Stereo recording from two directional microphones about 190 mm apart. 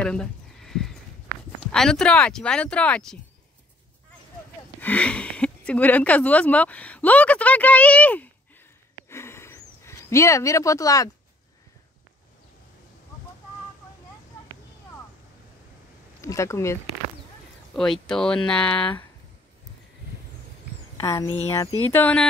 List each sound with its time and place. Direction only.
0.0 s a sound: 5° left (ahead or behind)
1.6 s speech: 5° left (ahead or behind)
4.7 s speech: 10° left (ahead or behind)
9.1 s a sound: 15° left (ahead or behind)
16.2 s speech: 15° left (ahead or behind)
17.7 s speech: centre (ahead or behind)
21.0 s speech: 15° left (ahead or behind)